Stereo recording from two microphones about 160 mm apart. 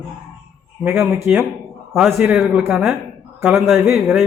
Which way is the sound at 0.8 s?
15° right (ahead or behind).